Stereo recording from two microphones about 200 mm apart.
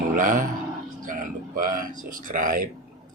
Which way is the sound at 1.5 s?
45° right (ahead or behind).